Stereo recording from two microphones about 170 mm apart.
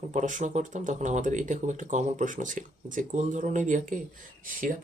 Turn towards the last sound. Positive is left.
turn(degrees=-55)  # may be behind; listen again after turning